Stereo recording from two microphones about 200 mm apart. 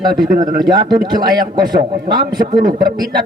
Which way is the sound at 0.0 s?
20° right (ahead or behind).